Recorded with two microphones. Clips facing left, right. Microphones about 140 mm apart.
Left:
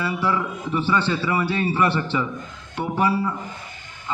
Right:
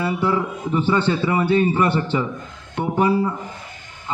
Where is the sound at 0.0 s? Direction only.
25° right (ahead or behind).